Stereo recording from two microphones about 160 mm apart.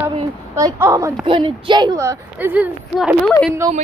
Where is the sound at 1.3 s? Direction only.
30° right (ahead or behind); by 3.1 s 10° right (ahead or behind).